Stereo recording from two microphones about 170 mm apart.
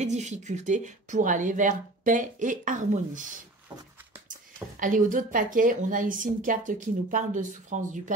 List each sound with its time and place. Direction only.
0.0 s a woman's voice: 45° right (ahead or behind)